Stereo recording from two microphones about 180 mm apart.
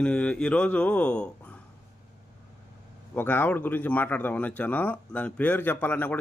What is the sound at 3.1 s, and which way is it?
A man's voice, 10° left (ahead or behind).